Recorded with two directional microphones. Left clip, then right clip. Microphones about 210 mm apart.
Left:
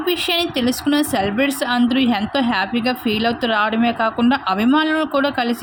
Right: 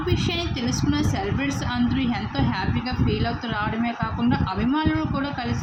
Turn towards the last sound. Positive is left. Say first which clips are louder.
# left 9 dB
turn(degrees=45)  # may be behind; listen again after turning